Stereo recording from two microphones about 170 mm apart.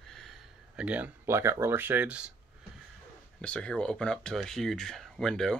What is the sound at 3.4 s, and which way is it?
Speech, 5° left (ahead or behind).